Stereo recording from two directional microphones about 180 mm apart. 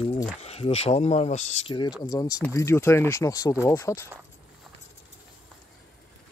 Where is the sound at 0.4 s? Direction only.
35° left (ahead or behind).